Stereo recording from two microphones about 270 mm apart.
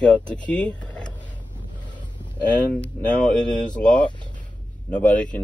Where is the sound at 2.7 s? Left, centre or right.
Centre.